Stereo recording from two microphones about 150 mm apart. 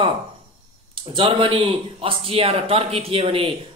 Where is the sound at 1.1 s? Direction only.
35° right (ahead or behind).